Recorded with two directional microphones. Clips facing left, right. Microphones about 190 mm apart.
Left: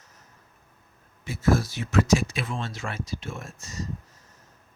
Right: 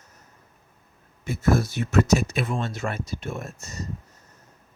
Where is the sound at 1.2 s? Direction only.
55° right (ahead or behind).